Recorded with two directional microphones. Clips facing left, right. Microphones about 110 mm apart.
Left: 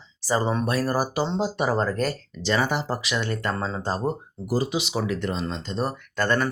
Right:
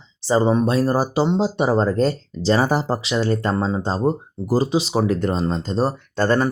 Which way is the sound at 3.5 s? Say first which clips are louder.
Right 6 dB; 20° right (ahead or behind).